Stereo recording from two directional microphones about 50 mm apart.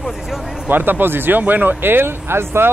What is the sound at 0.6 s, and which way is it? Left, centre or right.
Speech, right.